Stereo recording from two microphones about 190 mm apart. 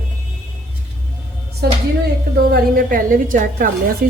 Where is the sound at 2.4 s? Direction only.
55° right (ahead or behind).